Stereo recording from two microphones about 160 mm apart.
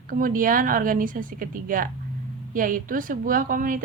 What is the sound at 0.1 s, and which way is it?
A woman's voice, 60° right (ahead or behind).